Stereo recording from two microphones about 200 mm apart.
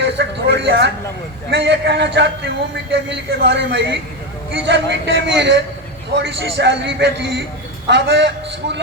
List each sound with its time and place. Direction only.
0.0 s a man's voice: 60° right (ahead or behind)